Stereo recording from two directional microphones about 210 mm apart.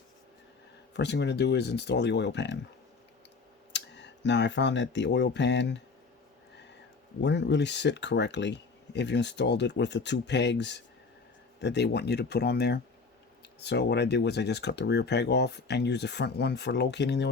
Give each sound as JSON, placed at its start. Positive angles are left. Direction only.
{"t": 0.9, "sound": "speech", "side_deg": 55}
{"t": 3.7, "sound": "speech", "side_deg": 55}
{"t": 7.2, "sound": "speech", "side_deg": 55}